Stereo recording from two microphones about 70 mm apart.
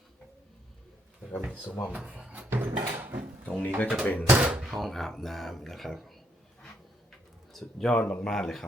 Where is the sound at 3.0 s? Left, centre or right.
Right.